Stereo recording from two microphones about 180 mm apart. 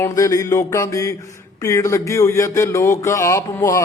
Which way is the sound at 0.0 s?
15° left (ahead or behind).